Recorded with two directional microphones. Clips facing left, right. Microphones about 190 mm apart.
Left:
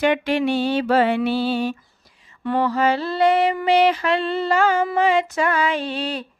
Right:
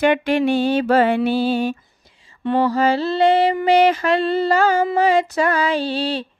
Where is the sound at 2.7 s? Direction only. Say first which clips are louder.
Right 3 dB; 35° right (ahead or behind).